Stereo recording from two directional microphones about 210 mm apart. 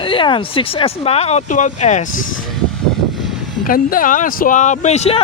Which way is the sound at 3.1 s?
Centre (ahead or behind).